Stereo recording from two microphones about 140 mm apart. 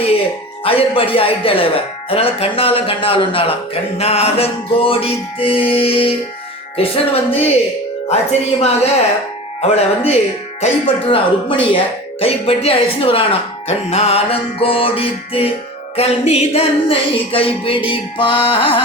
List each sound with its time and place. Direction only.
0.6 s speech: 40° left (ahead or behind)
6.7 s music: 45° left (ahead or behind)
10.6 s speech: 40° left (ahead or behind)
12.2 s music: 45° left (ahead or behind)
16.0 s speech: 45° left (ahead or behind)